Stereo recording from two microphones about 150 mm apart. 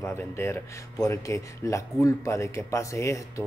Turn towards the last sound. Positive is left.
turn(degrees=20)  # may be behind; listen again after turning